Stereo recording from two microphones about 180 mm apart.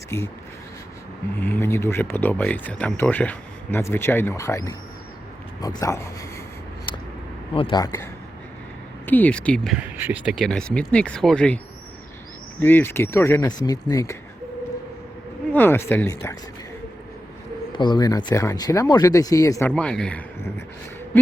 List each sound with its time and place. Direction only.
1.4 s speech: 10° left (ahead or behind)
7.5 s speech: 30° left (ahead or behind)
9.0 s speech: 10° left (ahead or behind)
10.0 s speech: 5° right (ahead or behind); by 14.2 s 15° left (ahead or behind)
15.5 s speech: 10° left (ahead or behind)
17.7 s speech: 25° left (ahead or behind)